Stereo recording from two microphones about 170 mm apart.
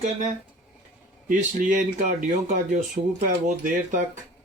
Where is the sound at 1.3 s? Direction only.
50° right (ahead or behind).